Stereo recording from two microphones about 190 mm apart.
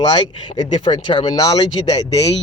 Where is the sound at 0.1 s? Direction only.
25° left (ahead or behind).